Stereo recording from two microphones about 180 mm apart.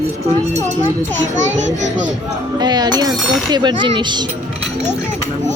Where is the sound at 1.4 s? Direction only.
40° right (ahead or behind).